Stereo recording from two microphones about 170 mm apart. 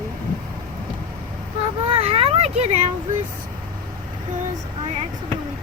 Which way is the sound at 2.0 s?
35° right (ahead or behind).